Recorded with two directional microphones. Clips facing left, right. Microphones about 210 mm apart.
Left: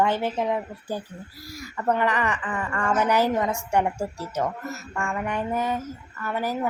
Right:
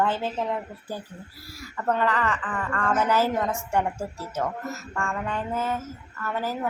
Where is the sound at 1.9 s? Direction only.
15° left (ahead or behind).